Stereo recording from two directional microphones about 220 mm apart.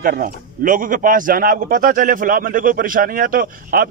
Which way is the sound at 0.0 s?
40° right (ahead or behind).